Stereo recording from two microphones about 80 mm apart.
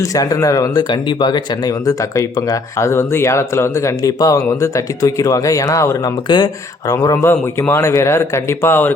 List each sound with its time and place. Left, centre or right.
0.0 s speech: left
6.2 s speech: left
7.7 s speech: left